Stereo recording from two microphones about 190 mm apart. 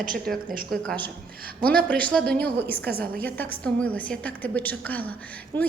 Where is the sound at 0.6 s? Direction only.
5° left (ahead or behind).